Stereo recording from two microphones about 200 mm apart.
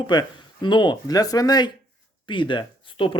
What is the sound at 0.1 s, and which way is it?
Speech, 20° left (ahead or behind).